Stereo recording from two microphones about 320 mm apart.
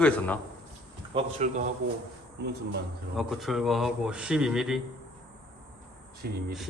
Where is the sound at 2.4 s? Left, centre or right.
Right.